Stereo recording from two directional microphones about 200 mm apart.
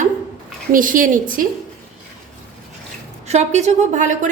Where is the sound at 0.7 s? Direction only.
45° right (ahead or behind).